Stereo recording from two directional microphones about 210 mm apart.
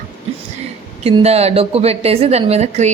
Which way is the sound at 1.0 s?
30° right (ahead or behind).